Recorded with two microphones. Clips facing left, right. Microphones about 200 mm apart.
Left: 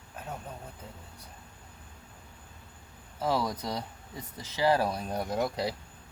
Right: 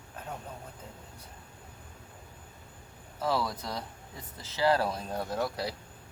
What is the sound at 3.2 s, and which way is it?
Speech, 15° left (ahead or behind).